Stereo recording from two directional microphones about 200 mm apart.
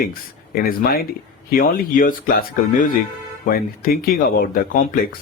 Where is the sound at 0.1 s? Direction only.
50° left (ahead or behind).